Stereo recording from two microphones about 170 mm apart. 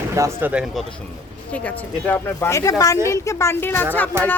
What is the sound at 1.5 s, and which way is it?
Speech, 10° left (ahead or behind).